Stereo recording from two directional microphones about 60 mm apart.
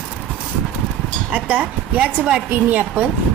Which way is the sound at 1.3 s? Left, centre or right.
Right.